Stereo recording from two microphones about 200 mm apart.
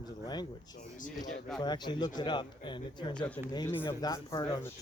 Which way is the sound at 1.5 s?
20° left (ahead or behind).